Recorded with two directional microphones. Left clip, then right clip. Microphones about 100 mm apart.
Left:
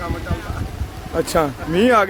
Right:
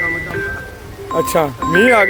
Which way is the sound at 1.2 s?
5° right (ahead or behind).